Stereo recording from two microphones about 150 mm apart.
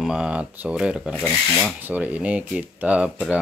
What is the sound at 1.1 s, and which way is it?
Speech, 5° left (ahead or behind).